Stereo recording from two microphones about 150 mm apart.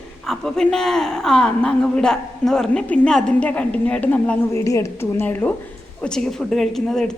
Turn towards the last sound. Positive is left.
turn(degrees=5)  # may be behind; listen again after turning